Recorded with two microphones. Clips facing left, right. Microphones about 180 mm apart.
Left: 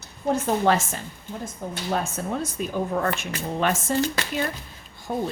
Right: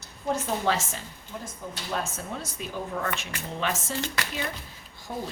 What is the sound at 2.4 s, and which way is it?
A woman's voice, 50° left (ahead or behind).